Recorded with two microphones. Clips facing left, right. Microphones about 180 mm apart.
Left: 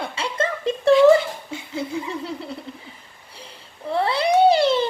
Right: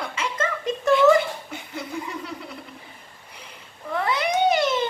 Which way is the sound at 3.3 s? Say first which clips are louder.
Left 4 dB; 30° left (ahead or behind).